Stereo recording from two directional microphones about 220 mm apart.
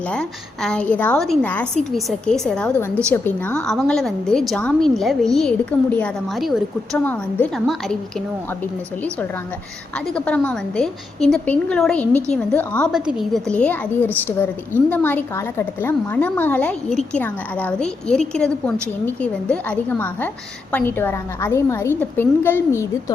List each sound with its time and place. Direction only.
0.1 s a woman's voice: 5° left (ahead or behind)
10.2 s a woman's voice: 5° left (ahead or behind)